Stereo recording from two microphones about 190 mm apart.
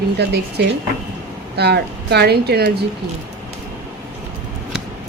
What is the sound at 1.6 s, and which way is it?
A woman's voice, 60° right (ahead or behind).